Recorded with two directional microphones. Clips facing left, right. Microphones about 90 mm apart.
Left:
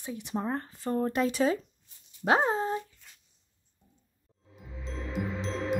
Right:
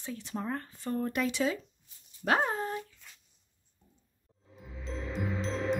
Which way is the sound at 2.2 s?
20° left (ahead or behind).